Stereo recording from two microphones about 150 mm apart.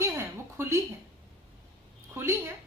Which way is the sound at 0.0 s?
20° right (ahead or behind).